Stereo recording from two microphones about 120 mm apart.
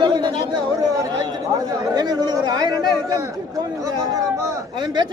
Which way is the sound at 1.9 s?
35° right (ahead or behind).